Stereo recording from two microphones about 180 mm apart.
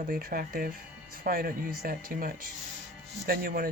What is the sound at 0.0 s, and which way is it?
Speech, 50° right (ahead or behind).